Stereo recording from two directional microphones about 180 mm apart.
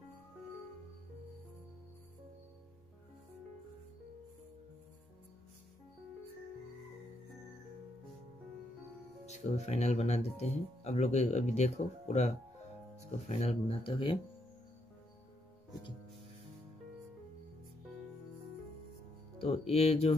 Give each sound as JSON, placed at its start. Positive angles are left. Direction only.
{"t": 9.2, "sound": "speech", "side_deg": 40}
{"t": 19.4, "sound": "speech", "side_deg": 35}